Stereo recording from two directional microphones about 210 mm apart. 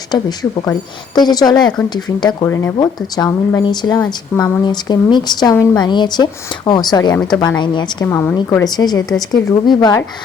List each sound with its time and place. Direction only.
0.1 s a woman's voice: 20° left (ahead or behind)
8.0 s a woman's voice: 10° left (ahead or behind)